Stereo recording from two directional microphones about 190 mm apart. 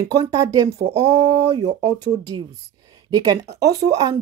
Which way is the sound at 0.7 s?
35° right (ahead or behind).